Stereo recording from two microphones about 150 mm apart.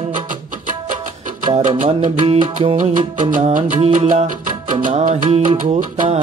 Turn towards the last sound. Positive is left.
turn(degrees=-60)  # may be behind; listen again after turning